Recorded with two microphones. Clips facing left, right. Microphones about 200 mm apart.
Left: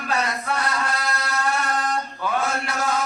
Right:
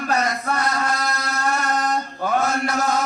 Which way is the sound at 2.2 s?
40° right (ahead or behind).